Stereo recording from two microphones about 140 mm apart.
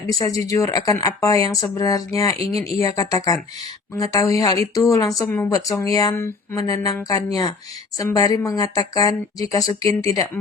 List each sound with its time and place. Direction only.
0.2 s speech: 25° left (ahead or behind)